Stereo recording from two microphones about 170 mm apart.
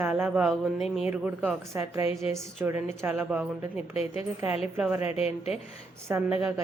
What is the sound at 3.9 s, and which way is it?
Speech, 35° left (ahead or behind).